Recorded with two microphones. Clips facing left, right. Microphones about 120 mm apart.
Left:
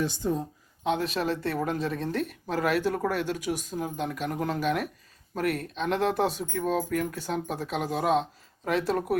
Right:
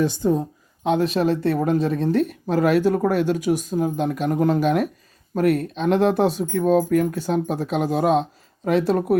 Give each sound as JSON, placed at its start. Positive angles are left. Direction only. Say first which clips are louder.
{"t": 0.0, "sound": "speech", "louder": "right 8 dB", "side_deg": -65}
{"t": 0.9, "sound": "speech", "louder": "right 8 dB", "side_deg": -30}